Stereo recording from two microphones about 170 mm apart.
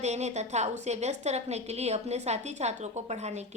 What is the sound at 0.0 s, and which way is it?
A woman's voice, 40° right (ahead or behind).